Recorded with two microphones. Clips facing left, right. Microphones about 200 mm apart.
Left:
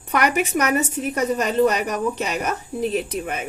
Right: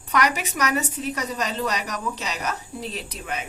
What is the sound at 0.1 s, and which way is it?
A woman's voice, 55° left (ahead or behind).